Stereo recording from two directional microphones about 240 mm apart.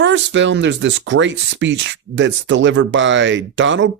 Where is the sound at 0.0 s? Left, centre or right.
Right.